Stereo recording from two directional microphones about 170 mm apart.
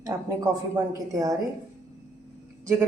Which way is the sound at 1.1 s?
20° right (ahead or behind).